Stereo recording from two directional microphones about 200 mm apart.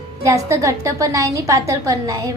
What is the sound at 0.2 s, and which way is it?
A woman's voice, 15° right (ahead or behind).